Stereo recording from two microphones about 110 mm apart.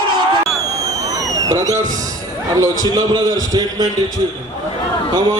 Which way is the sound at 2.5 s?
35° right (ahead or behind).